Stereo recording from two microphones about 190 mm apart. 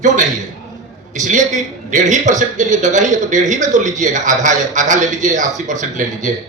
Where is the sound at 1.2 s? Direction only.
40° right (ahead or behind).